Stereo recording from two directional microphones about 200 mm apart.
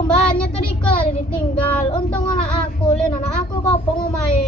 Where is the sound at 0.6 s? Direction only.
25° left (ahead or behind).